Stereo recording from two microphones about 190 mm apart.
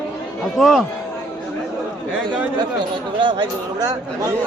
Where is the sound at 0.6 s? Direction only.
Centre (ahead or behind).